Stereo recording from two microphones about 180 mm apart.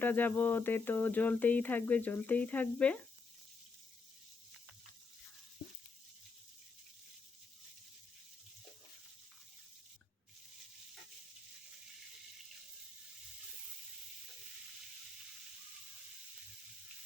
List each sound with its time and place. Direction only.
0.0 s speech: 10° left (ahead or behind)